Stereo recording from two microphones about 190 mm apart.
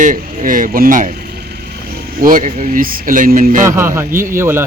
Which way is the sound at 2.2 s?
45° right (ahead or behind).